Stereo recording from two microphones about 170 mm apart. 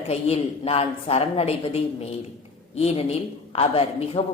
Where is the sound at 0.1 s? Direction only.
35° left (ahead or behind).